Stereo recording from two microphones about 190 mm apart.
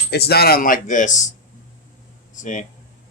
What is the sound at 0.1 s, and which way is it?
Speech, 55° left (ahead or behind).